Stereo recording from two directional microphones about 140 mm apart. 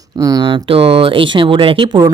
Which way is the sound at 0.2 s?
25° right (ahead or behind).